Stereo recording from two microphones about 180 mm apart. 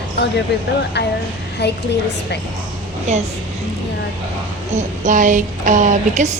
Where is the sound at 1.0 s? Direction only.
70° left (ahead or behind).